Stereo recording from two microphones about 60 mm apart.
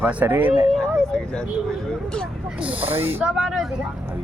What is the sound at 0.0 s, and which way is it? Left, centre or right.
Speech, right.